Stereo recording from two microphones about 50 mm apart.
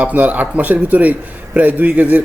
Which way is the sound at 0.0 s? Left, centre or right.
Right.